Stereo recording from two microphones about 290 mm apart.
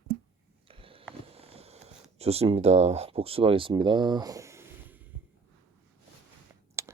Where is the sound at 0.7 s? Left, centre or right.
Centre.